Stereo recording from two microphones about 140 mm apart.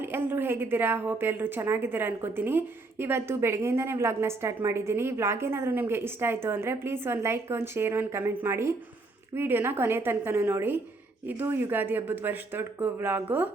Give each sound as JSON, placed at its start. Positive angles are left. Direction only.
{"t": 0.0, "sound": "a woman's voice", "side_deg": -15}